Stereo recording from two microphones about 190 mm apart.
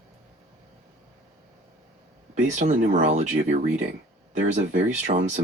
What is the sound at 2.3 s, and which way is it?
Speech, 40° right (ahead or behind).